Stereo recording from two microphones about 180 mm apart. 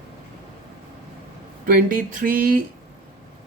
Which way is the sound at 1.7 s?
50° right (ahead or behind).